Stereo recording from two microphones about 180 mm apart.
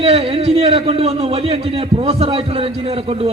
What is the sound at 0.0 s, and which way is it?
A man's voice, 30° right (ahead or behind).